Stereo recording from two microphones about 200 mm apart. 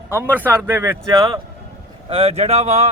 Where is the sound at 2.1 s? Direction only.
30° right (ahead or behind).